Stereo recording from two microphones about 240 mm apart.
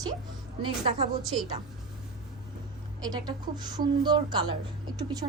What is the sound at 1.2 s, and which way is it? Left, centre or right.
Speech, centre.